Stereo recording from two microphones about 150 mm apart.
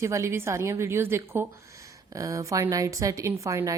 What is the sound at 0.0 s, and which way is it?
A woman's voice, 20° right (ahead or behind).